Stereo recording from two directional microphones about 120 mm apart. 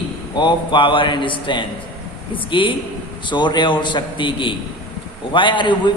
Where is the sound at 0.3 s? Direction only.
40° left (ahead or behind).